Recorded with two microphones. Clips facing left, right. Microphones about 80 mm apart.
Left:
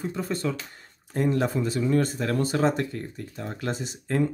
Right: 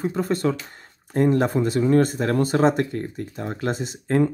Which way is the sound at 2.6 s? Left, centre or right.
Right.